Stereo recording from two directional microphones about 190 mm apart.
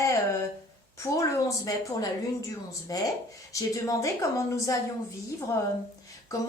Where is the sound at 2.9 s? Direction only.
20° left (ahead or behind).